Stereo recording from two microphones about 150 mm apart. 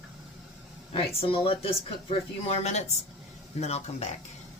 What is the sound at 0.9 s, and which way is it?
Speech, 40° left (ahead or behind).